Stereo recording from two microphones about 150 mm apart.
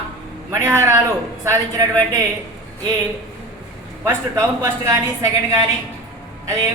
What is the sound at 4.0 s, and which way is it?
A woman's voice, 20° right (ahead or behind).